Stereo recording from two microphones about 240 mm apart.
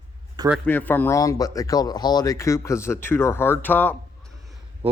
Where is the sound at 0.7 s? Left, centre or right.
Centre.